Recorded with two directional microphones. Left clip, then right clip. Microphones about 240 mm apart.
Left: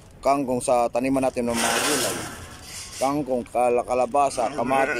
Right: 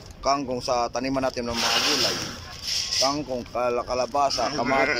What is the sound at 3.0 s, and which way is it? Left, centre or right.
Speech, centre.